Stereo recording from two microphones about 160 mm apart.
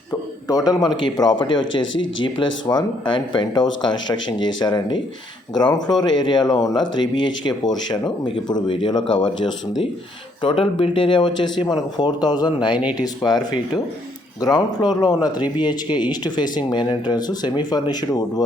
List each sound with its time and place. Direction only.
0.4 s speech: 25° left (ahead or behind)